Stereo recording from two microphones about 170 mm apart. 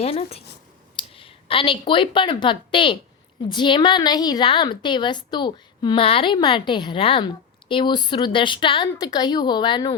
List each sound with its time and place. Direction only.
0.0 s a woman's voice: 35° left (ahead or behind)